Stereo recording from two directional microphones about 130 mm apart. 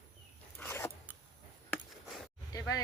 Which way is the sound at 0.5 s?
15° left (ahead or behind).